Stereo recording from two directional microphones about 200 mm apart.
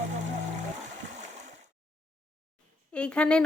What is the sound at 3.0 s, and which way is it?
Speech, 5° left (ahead or behind).